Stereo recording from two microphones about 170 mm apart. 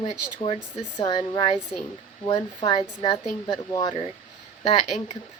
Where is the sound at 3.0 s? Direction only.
20° left (ahead or behind).